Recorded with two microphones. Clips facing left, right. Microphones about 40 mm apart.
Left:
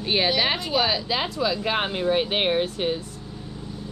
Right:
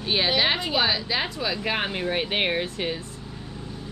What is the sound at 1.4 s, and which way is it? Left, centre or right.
Speech, right.